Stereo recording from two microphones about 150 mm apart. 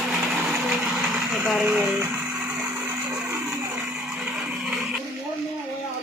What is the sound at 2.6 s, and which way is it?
Blender, 15° right (ahead or behind).